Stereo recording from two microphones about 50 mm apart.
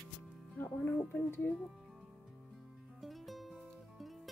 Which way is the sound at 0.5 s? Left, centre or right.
Left.